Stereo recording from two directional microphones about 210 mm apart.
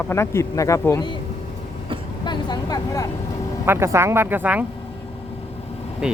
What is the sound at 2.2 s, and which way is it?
Speech, 20° left (ahead or behind).